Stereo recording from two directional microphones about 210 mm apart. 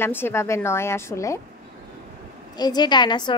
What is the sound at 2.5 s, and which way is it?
Speech, 20° left (ahead or behind).